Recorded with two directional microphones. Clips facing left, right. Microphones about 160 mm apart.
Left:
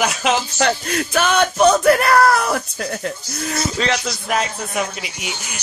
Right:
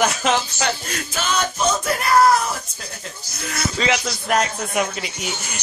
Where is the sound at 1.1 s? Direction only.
65° left (ahead or behind).